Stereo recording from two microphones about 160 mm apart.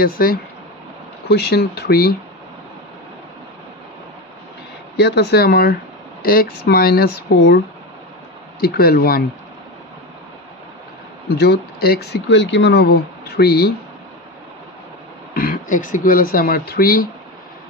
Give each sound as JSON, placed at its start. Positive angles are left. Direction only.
{"t": 0.0, "sound": "speech", "side_deg": 65}
{"t": 1.3, "sound": "speech", "side_deg": 90}
{"t": 4.9, "sound": "speech", "side_deg": 90}
{"t": 8.5, "sound": "speech", "side_deg": 70}
{"t": 11.3, "sound": "speech", "side_deg": 85}
{"t": 15.3, "sound": "speech", "side_deg": 65}